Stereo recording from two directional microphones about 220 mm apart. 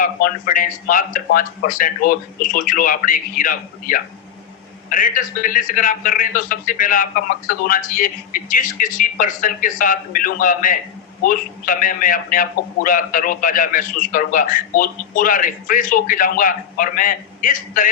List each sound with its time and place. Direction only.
0.0 s a man's voice: 40° left (ahead or behind)